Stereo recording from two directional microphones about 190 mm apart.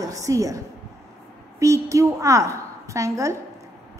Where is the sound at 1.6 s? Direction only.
15° right (ahead or behind).